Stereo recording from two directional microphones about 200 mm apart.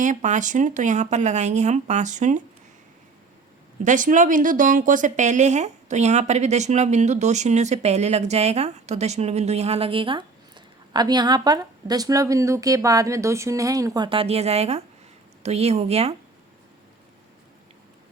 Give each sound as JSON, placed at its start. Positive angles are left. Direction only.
{"t": 0.0, "sound": "speech", "side_deg": -40}
{"t": 3.8, "sound": "a woman's voice", "side_deg": -40}